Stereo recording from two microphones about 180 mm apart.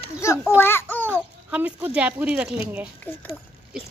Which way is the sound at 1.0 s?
10° right (ahead or behind).